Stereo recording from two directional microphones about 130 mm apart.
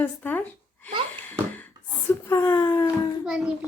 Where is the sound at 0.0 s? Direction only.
15° left (ahead or behind).